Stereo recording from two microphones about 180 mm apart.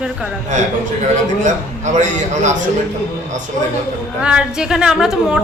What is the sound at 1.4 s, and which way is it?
A man's voice, 40° right (ahead or behind).